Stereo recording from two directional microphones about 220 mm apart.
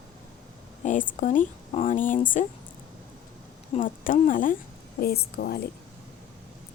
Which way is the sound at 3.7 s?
35° left (ahead or behind).